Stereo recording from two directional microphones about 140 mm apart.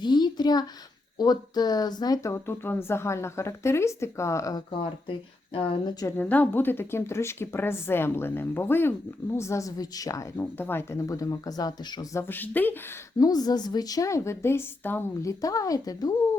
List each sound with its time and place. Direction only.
0.0 s a sound: 30° left (ahead or behind)
1.2 s speech: 30° left (ahead or behind)
4.7 s speech: 40° left (ahead or behind)
6.1 s a woman's voice: 10° left (ahead or behind); by 12.2 s 30° left (ahead or behind)
12.2 s a woman's voice: 15° left (ahead or behind)
13.1 s speech: 25° left (ahead or behind)